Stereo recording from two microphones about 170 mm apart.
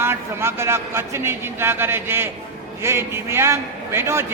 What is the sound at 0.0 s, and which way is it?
A man's voice, 15° right (ahead or behind).